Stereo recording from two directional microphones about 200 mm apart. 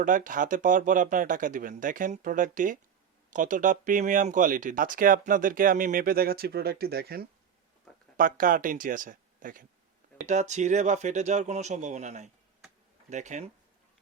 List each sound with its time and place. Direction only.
0.0 s speech: 40° right (ahead or behind)